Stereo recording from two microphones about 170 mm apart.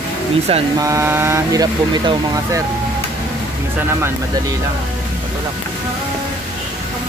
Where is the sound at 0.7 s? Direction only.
20° right (ahead or behind).